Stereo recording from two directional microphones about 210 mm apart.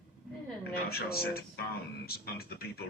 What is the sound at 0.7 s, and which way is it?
A man's voice, 45° left (ahead or behind).